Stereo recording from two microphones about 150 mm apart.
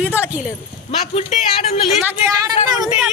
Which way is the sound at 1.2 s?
45° left (ahead or behind).